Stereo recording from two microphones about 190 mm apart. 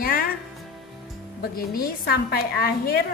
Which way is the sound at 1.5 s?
55° left (ahead or behind).